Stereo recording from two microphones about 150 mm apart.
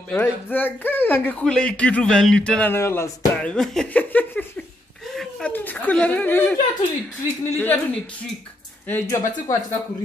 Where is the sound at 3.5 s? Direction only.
5° left (ahead or behind).